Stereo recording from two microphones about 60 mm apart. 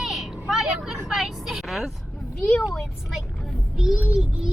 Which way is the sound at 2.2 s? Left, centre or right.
Centre.